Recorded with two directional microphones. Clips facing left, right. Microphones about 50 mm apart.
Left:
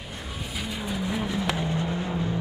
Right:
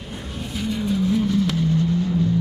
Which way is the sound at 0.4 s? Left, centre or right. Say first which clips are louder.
Right 8 dB; centre.